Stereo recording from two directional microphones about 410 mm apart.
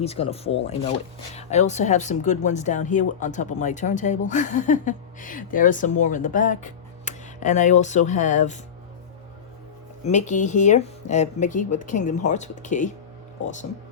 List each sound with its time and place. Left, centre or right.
0.0 s speech: centre
10.0 s speech: centre